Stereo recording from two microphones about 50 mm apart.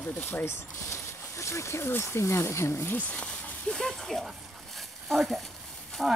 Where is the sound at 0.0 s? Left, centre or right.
Left.